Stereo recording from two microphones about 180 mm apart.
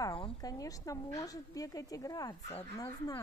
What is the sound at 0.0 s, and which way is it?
A woman's voice, 25° left (ahead or behind).